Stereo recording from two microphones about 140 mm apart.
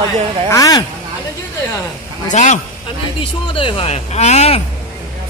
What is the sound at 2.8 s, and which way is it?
Speech, 40° left (ahead or behind).